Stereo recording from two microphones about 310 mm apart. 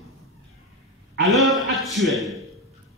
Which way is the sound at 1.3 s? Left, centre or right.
Centre.